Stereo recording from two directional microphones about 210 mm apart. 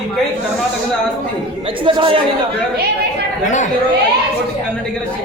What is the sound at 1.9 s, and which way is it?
Speech, 25° right (ahead or behind).